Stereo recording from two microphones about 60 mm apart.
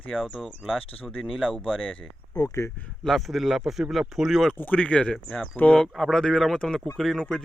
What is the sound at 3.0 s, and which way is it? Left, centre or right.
Speech, centre.